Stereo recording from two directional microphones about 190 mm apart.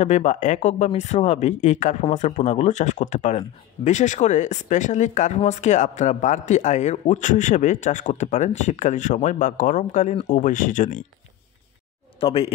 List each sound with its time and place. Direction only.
0.0 s speech: 35° left (ahead or behind)
12.2 s speech: 30° left (ahead or behind)